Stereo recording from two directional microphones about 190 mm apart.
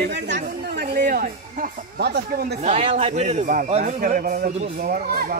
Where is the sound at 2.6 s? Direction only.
35° right (ahead or behind).